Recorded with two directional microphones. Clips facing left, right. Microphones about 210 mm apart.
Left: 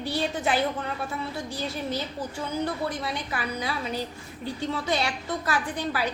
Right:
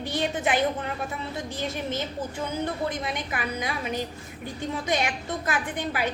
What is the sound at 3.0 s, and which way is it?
A woman's voice, 20° right (ahead or behind).